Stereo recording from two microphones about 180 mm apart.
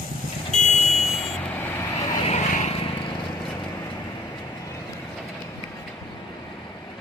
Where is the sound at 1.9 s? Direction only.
35° left (ahead or behind).